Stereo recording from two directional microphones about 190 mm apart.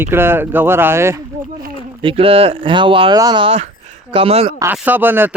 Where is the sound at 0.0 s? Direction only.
10° right (ahead or behind).